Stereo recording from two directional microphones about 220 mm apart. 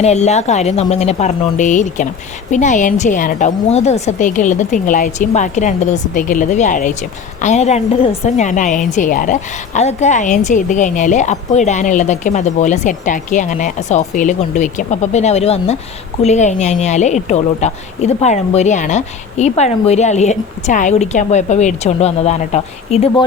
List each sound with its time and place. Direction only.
0.0 s a woman's voice: 30° left (ahead or behind)